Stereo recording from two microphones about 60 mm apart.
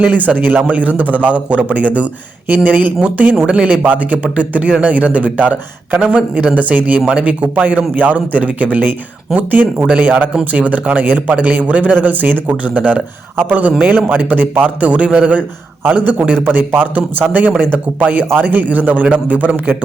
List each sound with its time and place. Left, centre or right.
0.3 s a man's voice: right